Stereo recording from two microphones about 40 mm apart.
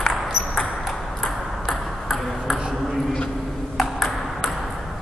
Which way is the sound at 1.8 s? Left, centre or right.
Centre.